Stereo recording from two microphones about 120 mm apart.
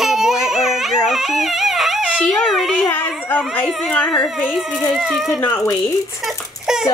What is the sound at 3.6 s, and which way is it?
Speech, centre (ahead or behind).